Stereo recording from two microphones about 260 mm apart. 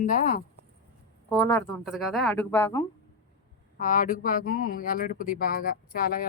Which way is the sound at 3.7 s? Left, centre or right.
Left.